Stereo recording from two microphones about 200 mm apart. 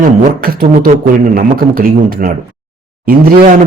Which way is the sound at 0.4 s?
45° right (ahead or behind).